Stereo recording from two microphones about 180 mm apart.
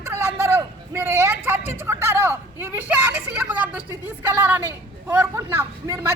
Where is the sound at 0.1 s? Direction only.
15° right (ahead or behind).